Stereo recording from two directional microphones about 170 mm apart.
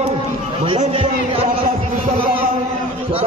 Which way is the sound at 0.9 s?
30° right (ahead or behind).